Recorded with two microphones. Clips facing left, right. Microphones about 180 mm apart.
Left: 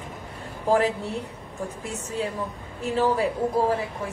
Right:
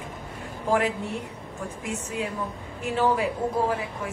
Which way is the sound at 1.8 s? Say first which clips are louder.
Even; 35° left (ahead or behind).